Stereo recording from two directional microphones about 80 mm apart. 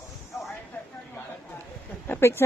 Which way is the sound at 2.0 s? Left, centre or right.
Left.